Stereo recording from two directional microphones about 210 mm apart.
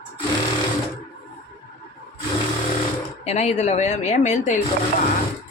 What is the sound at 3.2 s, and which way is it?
Speech, 30° left (ahead or behind).